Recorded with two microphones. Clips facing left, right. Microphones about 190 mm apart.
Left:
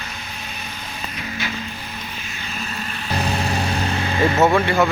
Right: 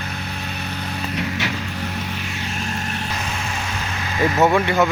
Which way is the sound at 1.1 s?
70° right (ahead or behind).